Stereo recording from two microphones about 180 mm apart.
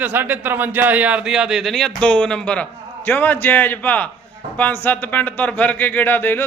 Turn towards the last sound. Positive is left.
turn(degrees=10)  # may be behind; listen again after turning